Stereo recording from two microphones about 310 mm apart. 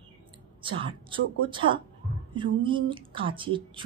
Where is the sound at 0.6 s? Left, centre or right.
Centre.